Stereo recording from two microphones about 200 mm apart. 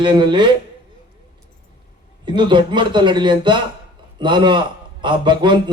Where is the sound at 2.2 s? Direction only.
25° right (ahead or behind).